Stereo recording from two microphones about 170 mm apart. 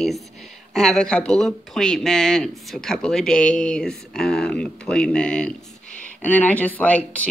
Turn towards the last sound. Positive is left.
turn(degrees=10)  # may be behind; listen again after turning